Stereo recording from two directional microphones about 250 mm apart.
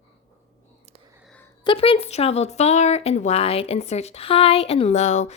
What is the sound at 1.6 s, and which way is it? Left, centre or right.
Speech, left.